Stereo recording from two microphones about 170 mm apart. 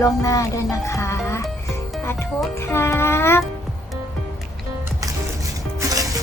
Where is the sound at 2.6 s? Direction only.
15° left (ahead or behind).